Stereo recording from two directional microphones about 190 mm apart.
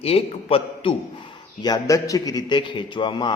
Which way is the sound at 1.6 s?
20° left (ahead or behind).